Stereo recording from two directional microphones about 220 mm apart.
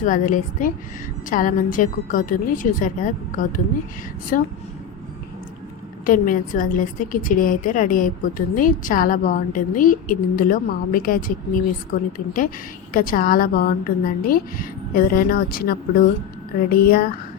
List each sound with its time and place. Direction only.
0.0 s a woman's voice: 35° left (ahead or behind)
6.1 s a woman's voice: 40° left (ahead or behind)